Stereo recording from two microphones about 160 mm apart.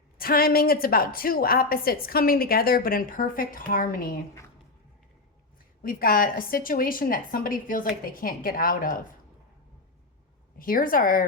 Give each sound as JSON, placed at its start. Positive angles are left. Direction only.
{"t": 0.2, "sound": "a woman's voice", "side_deg": 65}
{"t": 5.8, "sound": "a woman's voice", "side_deg": 65}
{"t": 10.6, "sound": "a woman's voice", "side_deg": 60}